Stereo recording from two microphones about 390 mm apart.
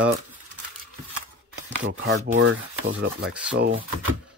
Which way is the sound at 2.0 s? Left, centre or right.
Right.